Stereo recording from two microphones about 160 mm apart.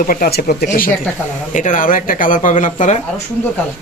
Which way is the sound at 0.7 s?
60° left (ahead or behind).